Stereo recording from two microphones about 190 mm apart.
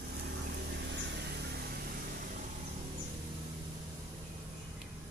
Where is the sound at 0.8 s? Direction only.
65° right (ahead or behind).